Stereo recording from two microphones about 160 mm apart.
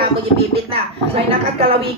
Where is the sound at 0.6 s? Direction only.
40° right (ahead or behind).